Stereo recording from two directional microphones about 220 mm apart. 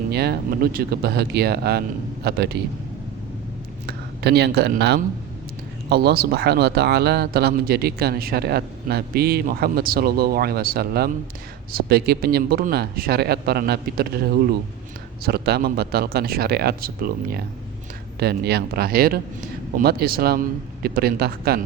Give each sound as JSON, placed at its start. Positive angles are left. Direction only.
{"t": 0.1, "sound": "a man's voice", "side_deg": -45}
{"t": 3.8, "sound": "a man's voice", "side_deg": -50}
{"t": 15.2, "sound": "a man's voice", "side_deg": -45}